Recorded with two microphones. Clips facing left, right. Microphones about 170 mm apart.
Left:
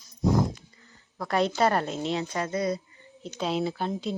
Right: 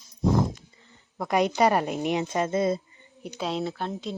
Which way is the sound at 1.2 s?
15° right (ahead or behind).